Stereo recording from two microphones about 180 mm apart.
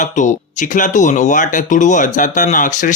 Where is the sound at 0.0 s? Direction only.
45° left (ahead or behind).